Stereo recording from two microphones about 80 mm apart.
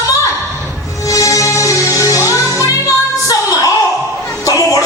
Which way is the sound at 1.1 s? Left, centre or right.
Left.